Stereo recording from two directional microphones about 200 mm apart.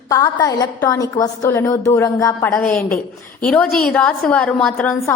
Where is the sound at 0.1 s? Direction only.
15° left (ahead or behind).